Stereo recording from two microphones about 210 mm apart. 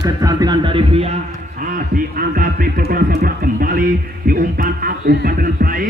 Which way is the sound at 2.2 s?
45° right (ahead or behind).